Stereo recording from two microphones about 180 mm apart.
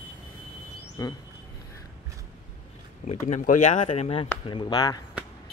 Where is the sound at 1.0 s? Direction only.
20° left (ahead or behind).